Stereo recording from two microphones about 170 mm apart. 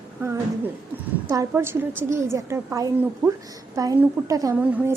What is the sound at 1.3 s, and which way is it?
A woman's voice, 15° right (ahead or behind).